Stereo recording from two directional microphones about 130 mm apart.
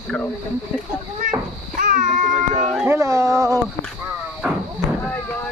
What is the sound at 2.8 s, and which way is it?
Speech, 20° right (ahead or behind).